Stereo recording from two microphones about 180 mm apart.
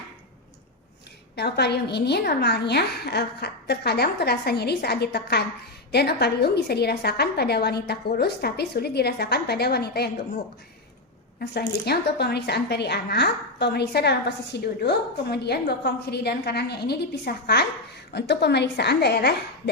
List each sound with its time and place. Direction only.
1.4 s a woman's voice: 65° left (ahead or behind)
11.3 s a woman's voice: 65° left (ahead or behind)